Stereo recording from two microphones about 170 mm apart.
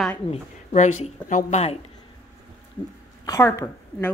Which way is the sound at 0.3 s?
45° left (ahead or behind).